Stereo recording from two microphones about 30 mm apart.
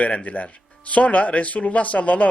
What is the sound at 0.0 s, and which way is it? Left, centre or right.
A man's voice, left.